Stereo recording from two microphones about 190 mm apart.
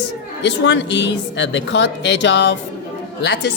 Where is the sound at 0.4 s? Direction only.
70° left (ahead or behind).